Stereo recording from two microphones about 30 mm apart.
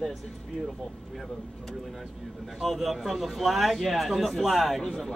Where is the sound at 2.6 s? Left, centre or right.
Centre.